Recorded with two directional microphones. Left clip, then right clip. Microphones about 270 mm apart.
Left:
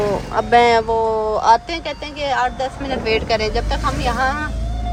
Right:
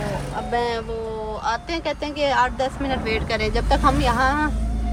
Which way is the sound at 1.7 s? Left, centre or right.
Centre.